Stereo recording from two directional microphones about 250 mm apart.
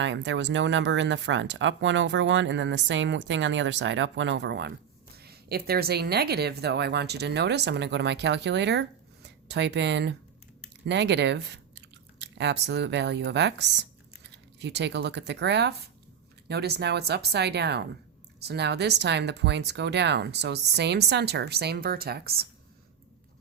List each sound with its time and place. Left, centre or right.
0.0 s speech: right